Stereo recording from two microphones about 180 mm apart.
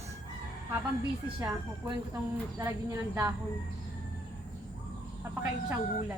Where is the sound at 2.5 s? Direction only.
15° right (ahead or behind).